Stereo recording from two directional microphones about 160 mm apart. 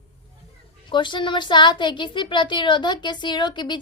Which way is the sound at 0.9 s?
30° left (ahead or behind).